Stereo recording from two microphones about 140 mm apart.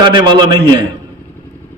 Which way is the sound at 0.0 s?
30° right (ahead or behind).